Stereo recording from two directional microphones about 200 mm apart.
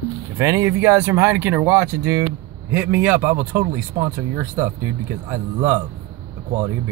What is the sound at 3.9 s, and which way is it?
Speech, 20° right (ahead or behind).